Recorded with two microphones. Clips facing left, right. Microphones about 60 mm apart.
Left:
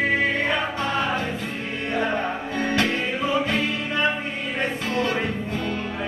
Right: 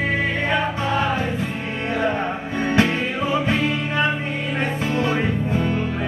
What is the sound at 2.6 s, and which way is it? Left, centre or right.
Music, right.